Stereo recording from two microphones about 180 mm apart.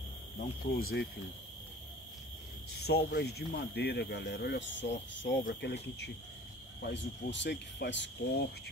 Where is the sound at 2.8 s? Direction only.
65° left (ahead or behind).